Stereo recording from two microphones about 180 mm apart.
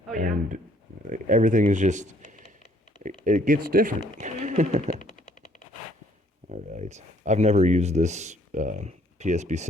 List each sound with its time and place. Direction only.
0.1 s speech: 45° right (ahead or behind)
3.2 s speech: 45° right (ahead or behind)
4.2 s speech: 45° right (ahead or behind)
6.5 s speech: 40° right (ahead or behind)